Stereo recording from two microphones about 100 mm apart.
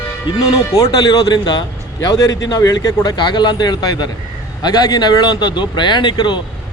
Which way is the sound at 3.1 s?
50° left (ahead or behind).